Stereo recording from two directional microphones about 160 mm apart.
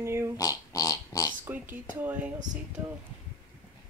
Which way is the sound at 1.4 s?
10° right (ahead or behind).